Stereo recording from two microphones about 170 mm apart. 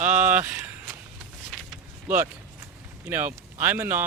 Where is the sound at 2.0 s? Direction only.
10° right (ahead or behind).